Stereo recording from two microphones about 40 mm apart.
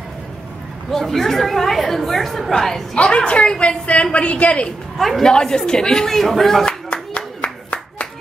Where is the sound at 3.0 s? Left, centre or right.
Left.